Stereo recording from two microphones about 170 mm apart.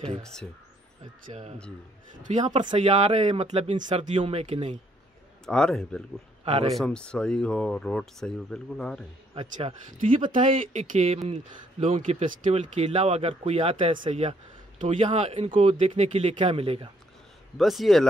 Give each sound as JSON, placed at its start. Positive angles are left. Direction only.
{"t": 1.2, "sound": "speech", "side_deg": -40}
{"t": 2.5, "sound": "speech", "side_deg": -30}
{"t": 5.4, "sound": "speech", "side_deg": 5}
{"t": 6.4, "sound": "speech", "side_deg": -35}
{"t": 6.8, "sound": "speech", "side_deg": 5}
{"t": 9.3, "sound": "speech", "side_deg": -35}
{"t": 17.6, "sound": "speech", "side_deg": 0}